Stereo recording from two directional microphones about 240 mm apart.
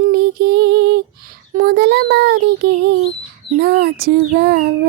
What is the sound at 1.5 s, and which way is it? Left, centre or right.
Child singing, right.